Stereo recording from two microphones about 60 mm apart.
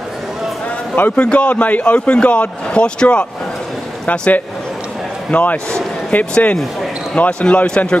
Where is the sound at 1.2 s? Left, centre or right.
Centre.